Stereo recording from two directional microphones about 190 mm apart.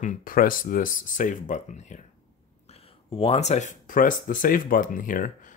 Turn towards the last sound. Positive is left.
turn(degrees=45)  # may be behind; listen again after turning